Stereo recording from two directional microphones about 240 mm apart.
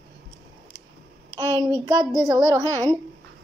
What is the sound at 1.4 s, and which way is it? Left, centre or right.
Speech, centre.